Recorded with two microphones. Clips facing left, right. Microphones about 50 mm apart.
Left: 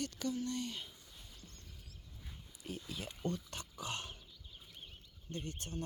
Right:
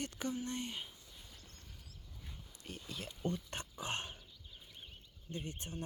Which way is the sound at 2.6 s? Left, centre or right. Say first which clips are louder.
Left 2 dB; centre.